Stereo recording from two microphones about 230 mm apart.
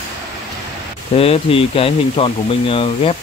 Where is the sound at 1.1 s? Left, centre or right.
Left.